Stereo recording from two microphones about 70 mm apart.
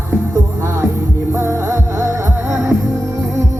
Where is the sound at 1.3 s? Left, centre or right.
Right.